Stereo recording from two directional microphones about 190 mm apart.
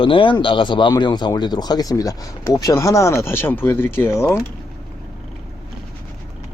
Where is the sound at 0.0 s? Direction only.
25° left (ahead or behind).